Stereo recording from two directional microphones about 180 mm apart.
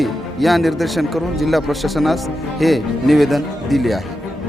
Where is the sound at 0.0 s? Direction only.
Centre (ahead or behind).